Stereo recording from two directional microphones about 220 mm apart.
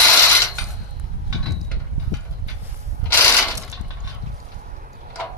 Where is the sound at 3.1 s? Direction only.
10° left (ahead or behind).